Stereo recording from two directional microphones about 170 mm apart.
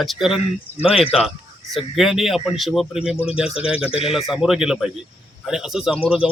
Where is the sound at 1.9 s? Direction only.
Centre (ahead or behind).